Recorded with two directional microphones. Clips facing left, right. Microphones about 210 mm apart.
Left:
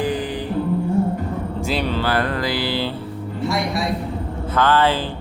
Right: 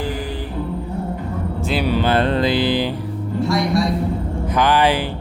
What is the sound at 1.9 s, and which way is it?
Mantra, 20° right (ahead or behind).